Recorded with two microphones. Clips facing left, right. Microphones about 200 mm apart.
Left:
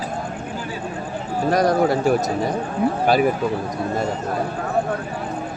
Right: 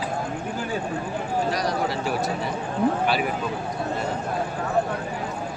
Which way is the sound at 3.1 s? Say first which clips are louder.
Left 7 dB; 45° left (ahead or behind).